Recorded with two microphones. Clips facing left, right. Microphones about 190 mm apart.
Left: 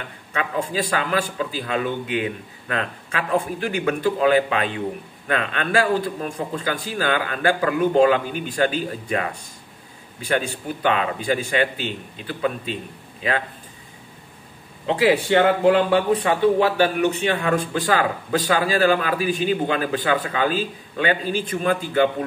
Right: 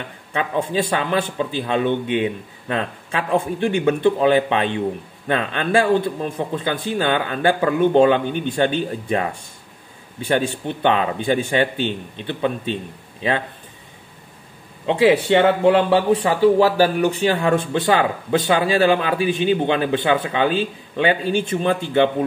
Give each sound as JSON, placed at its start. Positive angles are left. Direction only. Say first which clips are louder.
{"t": 0.3, "sound": "speech", "louder": "right 3 dB", "side_deg": -25}
{"t": 14.9, "sound": "speech", "louder": "right 3 dB", "side_deg": -25}
{"t": 15.9, "sound": "speech", "louder": "right 2 dB", "side_deg": -30}